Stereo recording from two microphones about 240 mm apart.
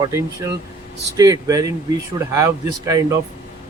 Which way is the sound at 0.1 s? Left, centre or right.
Centre.